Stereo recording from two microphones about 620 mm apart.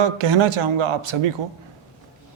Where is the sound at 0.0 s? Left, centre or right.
Right.